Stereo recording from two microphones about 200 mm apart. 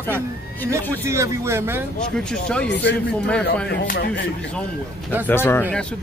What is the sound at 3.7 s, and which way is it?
Speech, 50° left (ahead or behind).